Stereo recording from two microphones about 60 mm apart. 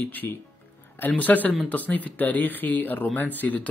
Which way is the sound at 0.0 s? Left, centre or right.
Left.